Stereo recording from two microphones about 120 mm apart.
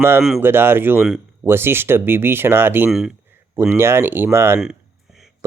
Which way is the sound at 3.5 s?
20° right (ahead or behind).